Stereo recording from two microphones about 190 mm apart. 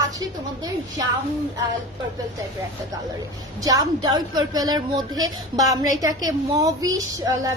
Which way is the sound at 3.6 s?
20° right (ahead or behind).